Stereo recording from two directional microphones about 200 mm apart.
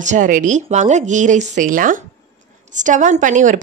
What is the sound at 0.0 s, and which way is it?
A woman's voice, 40° right (ahead or behind).